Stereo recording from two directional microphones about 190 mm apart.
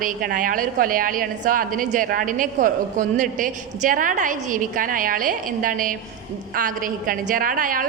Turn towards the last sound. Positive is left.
turn(degrees=-45)  # may be behind; listen again after turning